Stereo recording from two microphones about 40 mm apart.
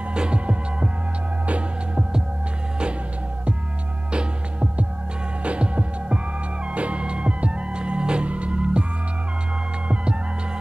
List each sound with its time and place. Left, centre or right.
0.1 s music: right
4.1 s music: right